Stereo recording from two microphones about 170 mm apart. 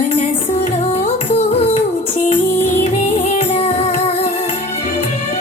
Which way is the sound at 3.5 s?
35° left (ahead or behind).